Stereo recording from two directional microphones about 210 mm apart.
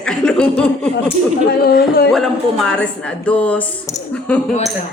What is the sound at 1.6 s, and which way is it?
Speech, 45° left (ahead or behind).